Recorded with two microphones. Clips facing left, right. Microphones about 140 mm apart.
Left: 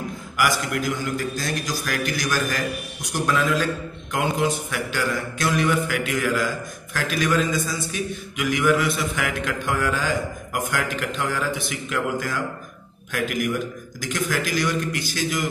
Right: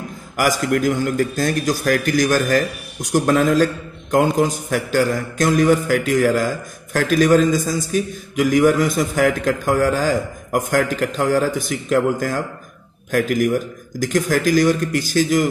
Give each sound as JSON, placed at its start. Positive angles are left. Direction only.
{"t": 0.4, "sound": "a man's voice", "side_deg": -45}